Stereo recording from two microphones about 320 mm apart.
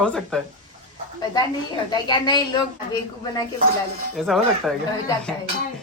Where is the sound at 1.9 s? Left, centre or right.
Centre.